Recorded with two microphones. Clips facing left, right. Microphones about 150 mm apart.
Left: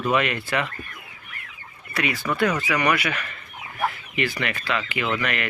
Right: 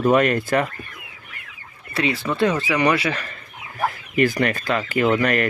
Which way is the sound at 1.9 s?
30° right (ahead or behind).